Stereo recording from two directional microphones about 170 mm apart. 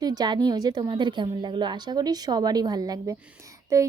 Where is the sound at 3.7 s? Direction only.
15° right (ahead or behind).